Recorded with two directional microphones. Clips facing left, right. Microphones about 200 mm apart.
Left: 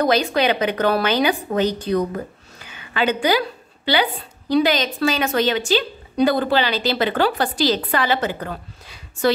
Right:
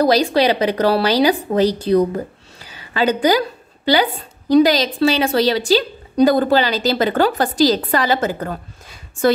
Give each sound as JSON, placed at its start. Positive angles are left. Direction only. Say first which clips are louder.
{"t": 0.0, "sound": "a woman's voice", "louder": "right 4 dB", "side_deg": -35}